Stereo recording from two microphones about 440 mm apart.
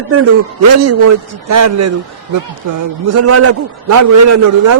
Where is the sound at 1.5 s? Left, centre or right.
Right.